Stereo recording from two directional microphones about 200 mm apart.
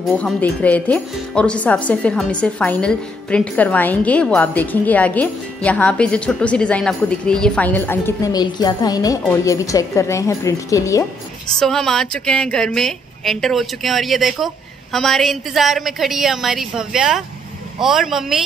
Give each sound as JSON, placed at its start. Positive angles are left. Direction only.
{"t": 0.0, "sound": "a woman's voice", "side_deg": 5}
{"t": 11.4, "sound": "speech", "side_deg": 0}